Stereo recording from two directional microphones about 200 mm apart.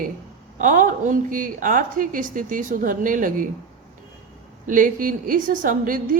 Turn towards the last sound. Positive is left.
turn(degrees=-45)  # may be behind; listen again after turning